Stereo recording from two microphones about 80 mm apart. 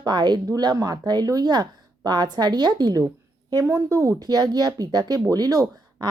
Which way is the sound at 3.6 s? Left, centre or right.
Right.